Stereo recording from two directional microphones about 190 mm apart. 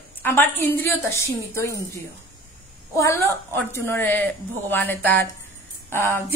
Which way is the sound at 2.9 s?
15° left (ahead or behind).